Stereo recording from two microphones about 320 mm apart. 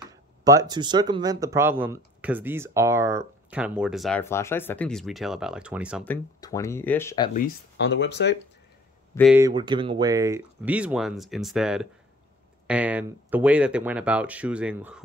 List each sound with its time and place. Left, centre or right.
0.1 s speech: centre
6.4 s speech: centre
7.3 s speech: left
9.1 s speech: centre
9.4 s speech: centre